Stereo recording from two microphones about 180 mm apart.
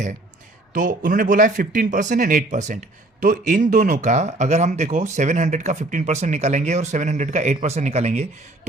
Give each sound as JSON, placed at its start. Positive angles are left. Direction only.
{"t": 0.7, "sound": "speech", "side_deg": -45}